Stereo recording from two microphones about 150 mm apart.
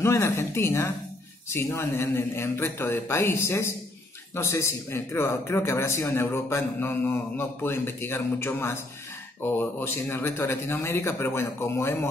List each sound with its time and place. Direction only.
0.0 s a man's voice: 20° left (ahead or behind)